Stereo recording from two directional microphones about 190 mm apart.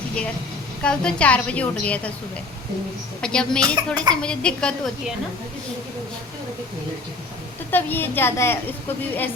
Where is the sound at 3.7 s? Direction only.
20° right (ahead or behind).